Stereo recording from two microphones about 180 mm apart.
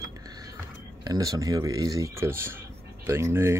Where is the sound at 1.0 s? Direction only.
20° right (ahead or behind).